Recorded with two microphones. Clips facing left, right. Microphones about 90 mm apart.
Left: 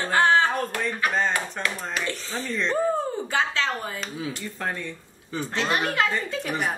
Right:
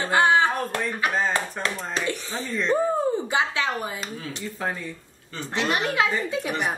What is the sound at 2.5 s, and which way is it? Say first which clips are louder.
Speech: right 2 dB; 5° right (ahead or behind).